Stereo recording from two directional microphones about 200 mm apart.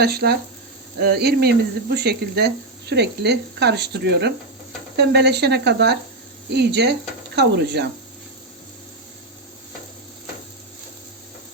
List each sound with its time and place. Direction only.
0.0 s speech: 50° right (ahead or behind)